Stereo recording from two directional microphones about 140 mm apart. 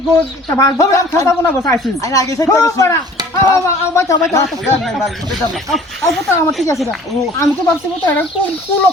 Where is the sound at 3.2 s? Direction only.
30° right (ahead or behind).